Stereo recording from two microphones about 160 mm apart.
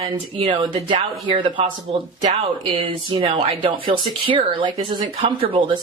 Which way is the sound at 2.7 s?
30° right (ahead or behind).